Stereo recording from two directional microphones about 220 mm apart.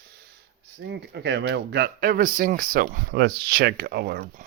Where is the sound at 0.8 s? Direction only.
50° right (ahead or behind).